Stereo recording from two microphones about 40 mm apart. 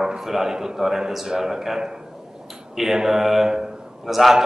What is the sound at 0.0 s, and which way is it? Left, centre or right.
A man's voice, centre.